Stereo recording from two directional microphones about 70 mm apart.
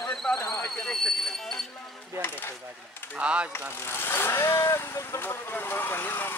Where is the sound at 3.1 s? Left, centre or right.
Centre.